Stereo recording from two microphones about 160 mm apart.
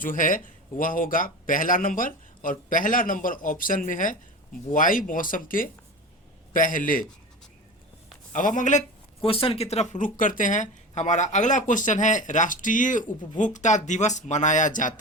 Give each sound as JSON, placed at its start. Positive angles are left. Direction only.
{"t": 0.0, "sound": "speech", "side_deg": 55}
{"t": 8.3, "sound": "speech", "side_deg": 55}
{"t": 9.2, "sound": "speech", "side_deg": 35}